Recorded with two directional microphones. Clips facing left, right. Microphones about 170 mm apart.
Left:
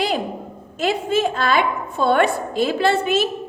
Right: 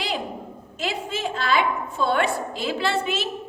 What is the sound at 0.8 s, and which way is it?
A woman's voice, 50° left (ahead or behind).